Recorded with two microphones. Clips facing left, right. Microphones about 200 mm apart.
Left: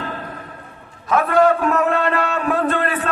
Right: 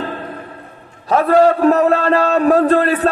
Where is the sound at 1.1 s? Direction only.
35° right (ahead or behind).